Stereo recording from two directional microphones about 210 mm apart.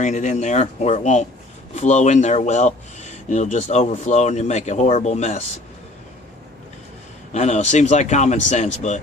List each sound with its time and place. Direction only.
0.0 s speech: 35° left (ahead or behind)
7.3 s speech: 35° left (ahead or behind)